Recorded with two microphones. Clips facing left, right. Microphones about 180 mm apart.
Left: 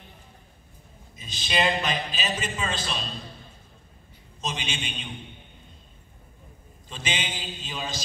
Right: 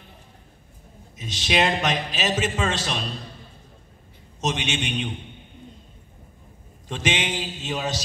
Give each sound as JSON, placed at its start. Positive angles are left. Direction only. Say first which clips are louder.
{"t": 1.1, "sound": "speech", "louder": "right 5 dB", "side_deg": -90}
{"t": 1.8, "sound": "music", "louder": "right 4 dB", "side_deg": -85}
{"t": 4.4, "sound": "music", "louder": "right 7 dB", "side_deg": -85}
{"t": 6.9, "sound": "a man's voice", "louder": "right 7 dB", "side_deg": -90}
{"t": 7.6, "sound": "mantra", "louder": "right 7 dB", "side_deg": -75}